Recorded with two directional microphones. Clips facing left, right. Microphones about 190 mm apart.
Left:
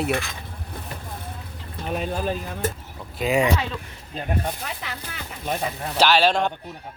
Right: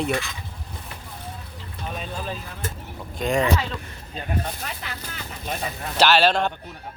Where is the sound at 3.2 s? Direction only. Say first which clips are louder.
Left 1 dB; 5° left (ahead or behind).